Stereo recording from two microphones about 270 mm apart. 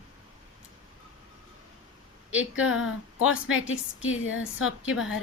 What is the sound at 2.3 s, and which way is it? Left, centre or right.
A woman's voice, left.